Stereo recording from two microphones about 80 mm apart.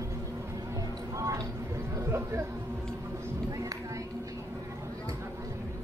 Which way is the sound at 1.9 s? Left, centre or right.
Right.